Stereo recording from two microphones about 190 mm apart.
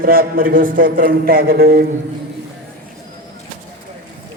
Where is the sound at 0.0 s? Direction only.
50° right (ahead or behind).